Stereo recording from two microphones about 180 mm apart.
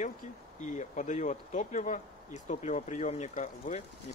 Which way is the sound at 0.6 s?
40° left (ahead or behind).